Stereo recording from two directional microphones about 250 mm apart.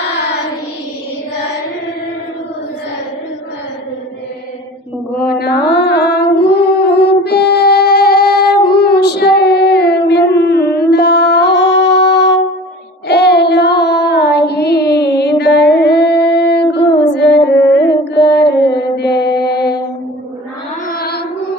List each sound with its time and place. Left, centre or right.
5.1 s mantra: left
13.1 s child singing: left
15.4 s a sound: left
17.4 s music: left
20.8 s music: left